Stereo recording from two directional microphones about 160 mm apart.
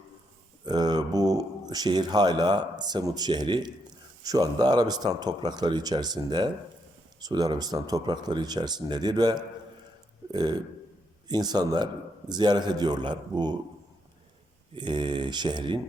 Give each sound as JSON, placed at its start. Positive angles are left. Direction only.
{"t": 0.6, "sound": "speech", "side_deg": -25}
{"t": 14.8, "sound": "speech", "side_deg": -30}